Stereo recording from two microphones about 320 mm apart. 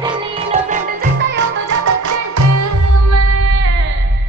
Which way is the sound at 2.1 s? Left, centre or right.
Right.